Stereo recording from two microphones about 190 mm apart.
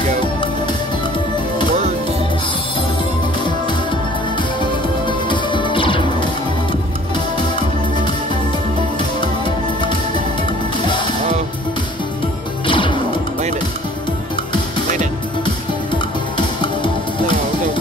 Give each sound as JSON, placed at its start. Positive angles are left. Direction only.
{"t": 5.0, "sound": "music", "side_deg": 25}
{"t": 12.6, "sound": "music", "side_deg": 25}
{"t": 15.9, "sound": "music", "side_deg": 25}